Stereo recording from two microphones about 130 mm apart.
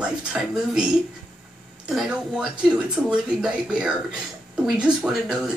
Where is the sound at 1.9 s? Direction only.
5° right (ahead or behind).